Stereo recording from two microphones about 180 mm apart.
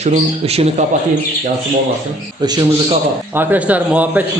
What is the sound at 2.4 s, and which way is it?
Speech, 25° right (ahead or behind).